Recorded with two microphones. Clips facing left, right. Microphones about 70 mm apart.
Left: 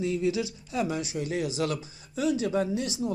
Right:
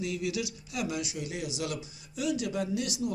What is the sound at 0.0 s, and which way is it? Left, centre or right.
Speech, left.